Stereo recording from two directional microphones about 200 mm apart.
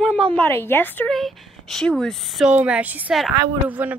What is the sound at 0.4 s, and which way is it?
Speech, 10° left (ahead or behind).